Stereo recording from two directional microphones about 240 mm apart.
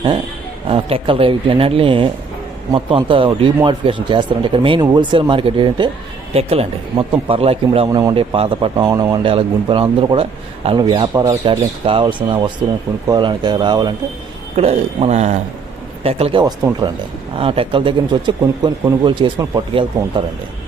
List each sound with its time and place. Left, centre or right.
0.7 s speech: right